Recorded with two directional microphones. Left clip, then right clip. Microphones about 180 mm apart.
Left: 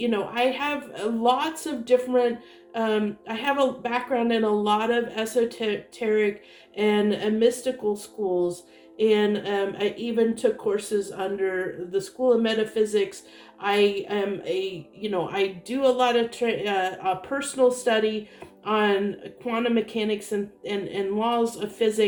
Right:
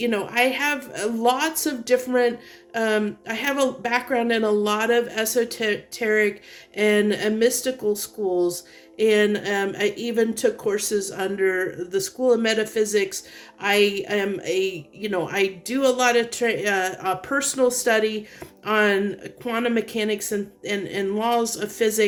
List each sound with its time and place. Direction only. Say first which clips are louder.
0.0 s speech: right 3 dB; 50° right (ahead or behind)